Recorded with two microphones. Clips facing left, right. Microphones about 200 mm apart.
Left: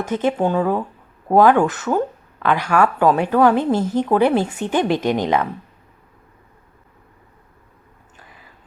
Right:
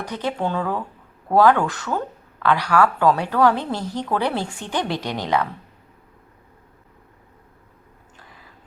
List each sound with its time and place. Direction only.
0.0 s speech: 20° left (ahead or behind)